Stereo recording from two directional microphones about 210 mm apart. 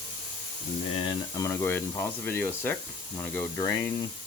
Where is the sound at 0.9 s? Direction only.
25° left (ahead or behind).